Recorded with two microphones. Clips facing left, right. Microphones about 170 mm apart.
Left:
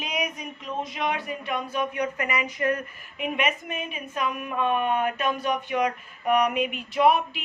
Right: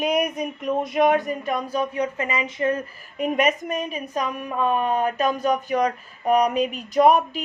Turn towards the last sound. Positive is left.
turn(degrees=-40)  # may be behind; listen again after turning